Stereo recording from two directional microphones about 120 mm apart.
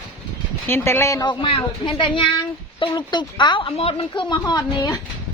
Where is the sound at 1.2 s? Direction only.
45° left (ahead or behind); by 5.0 s 25° left (ahead or behind).